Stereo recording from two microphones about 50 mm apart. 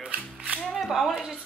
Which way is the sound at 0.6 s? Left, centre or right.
Centre.